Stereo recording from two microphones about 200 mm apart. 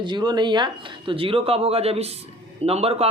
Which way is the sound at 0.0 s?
20° right (ahead or behind).